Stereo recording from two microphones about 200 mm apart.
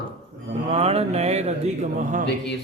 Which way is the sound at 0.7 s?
30° right (ahead or behind).